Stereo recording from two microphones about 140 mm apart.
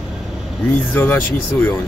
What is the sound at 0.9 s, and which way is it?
Speech, 15° left (ahead or behind).